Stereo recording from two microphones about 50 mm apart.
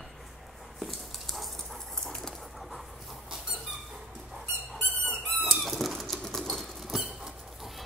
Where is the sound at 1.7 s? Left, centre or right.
Centre.